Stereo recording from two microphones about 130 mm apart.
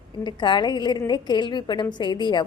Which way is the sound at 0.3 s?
35° left (ahead or behind).